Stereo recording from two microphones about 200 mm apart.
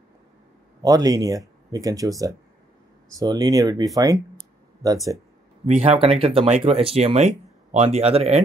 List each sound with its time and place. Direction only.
0.8 s speech: 20° right (ahead or behind)
5.9 s speech: 30° right (ahead or behind)